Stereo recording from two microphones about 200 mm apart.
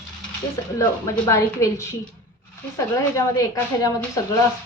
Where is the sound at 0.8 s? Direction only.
15° left (ahead or behind).